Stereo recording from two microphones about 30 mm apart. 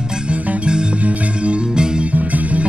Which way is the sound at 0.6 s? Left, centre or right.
Right.